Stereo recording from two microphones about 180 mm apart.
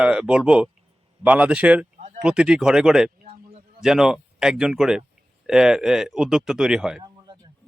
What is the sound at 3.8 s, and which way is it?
Speech, 5° right (ahead or behind).